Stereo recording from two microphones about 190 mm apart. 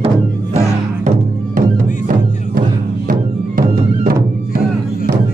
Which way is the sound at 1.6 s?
45° right (ahead or behind).